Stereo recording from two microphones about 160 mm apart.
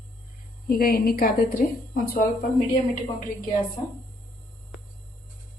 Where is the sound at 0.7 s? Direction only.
70° left (ahead or behind).